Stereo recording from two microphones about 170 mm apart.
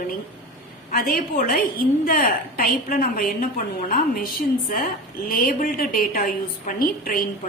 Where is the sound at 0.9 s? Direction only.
55° left (ahead or behind).